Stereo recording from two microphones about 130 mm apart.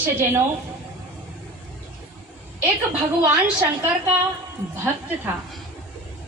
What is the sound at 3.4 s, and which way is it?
Speech, 10° right (ahead or behind).